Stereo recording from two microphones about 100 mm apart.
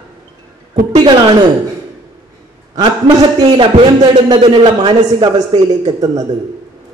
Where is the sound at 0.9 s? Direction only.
45° right (ahead or behind).